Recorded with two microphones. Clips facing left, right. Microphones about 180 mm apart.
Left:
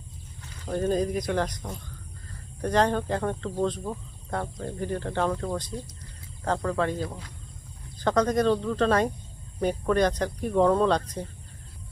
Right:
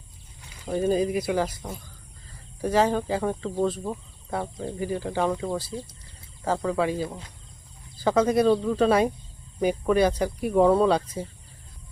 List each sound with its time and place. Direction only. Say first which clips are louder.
0.4 s speech: right 2 dB; 10° right (ahead or behind)